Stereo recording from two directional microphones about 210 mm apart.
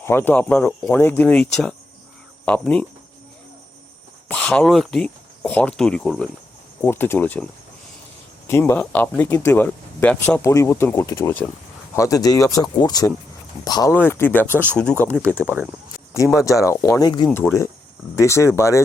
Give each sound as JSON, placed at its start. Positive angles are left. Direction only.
{"t": 0.0, "sound": "speech", "side_deg": 10}
{"t": 2.4, "sound": "cricket", "side_deg": 5}
{"t": 4.3, "sound": "speech", "side_deg": 5}
{"t": 8.4, "sound": "speech", "side_deg": 10}
{"t": 15.4, "sound": "speech", "side_deg": -10}
{"t": 16.4, "sound": "speech", "side_deg": 15}